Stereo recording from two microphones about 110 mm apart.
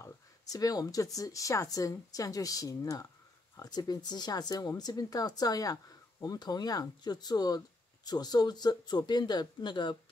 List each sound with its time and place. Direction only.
0.0 s speech: 35° left (ahead or behind)